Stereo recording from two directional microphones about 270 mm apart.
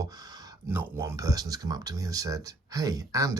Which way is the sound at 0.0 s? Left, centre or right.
Centre.